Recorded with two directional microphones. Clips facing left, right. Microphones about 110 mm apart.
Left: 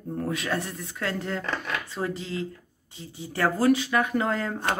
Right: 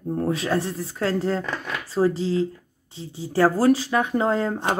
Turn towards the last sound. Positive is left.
turn(degrees=-30)  # may be behind; listen again after turning